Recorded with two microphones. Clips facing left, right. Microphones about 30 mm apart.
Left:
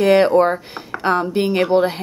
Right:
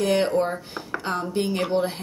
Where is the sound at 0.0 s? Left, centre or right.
Left.